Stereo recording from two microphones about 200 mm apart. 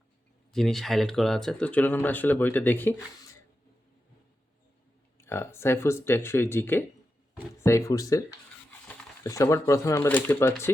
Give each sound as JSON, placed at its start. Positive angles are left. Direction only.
{"t": 0.5, "sound": "speech", "side_deg": 0}
{"t": 5.1, "sound": "speech", "side_deg": 10}